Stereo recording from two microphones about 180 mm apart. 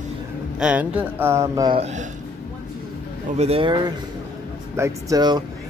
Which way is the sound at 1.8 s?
40° right (ahead or behind).